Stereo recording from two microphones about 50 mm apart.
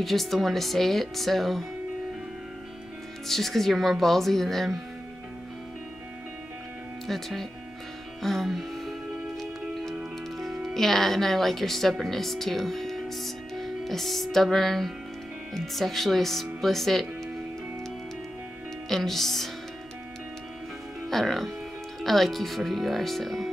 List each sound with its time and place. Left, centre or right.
0.0 s speech: centre
3.3 s speech: centre
7.1 s speech: centre
8.2 s music: centre
10.4 s speech: centre
18.9 s speech: centre
21.1 s speech: centre